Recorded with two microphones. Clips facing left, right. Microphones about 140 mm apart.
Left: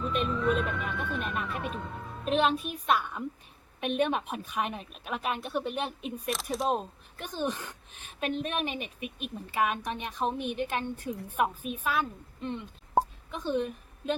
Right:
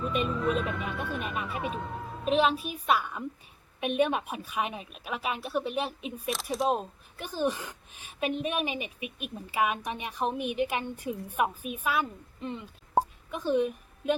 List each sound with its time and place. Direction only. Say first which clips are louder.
0.1 s a woman's voice: left 1 dB; centre (ahead or behind)